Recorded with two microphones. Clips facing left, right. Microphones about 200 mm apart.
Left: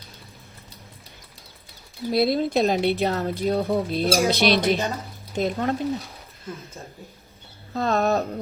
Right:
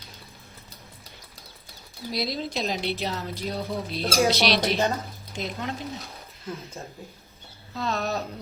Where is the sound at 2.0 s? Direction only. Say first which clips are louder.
Left 9 dB; 55° left (ahead or behind).